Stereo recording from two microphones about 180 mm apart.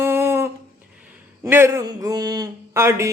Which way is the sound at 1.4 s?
15° right (ahead or behind).